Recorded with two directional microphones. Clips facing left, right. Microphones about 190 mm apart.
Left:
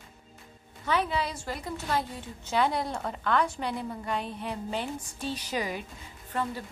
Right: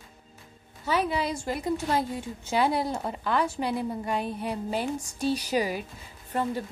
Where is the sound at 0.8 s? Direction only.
10° right (ahead or behind).